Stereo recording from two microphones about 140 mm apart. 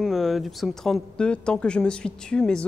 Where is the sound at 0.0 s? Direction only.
Centre (ahead or behind).